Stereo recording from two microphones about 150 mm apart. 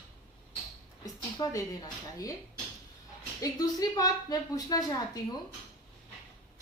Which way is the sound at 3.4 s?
25° left (ahead or behind).